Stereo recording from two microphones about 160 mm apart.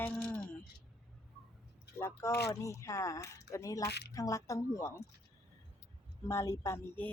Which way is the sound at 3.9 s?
90° left.